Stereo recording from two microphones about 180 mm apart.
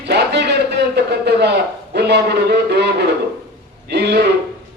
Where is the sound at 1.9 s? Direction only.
65° right (ahead or behind).